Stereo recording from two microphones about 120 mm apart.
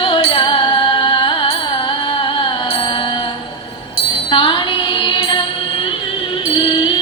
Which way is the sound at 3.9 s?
45° left (ahead or behind).